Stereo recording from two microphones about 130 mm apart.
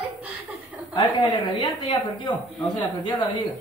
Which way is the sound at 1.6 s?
35° left (ahead or behind).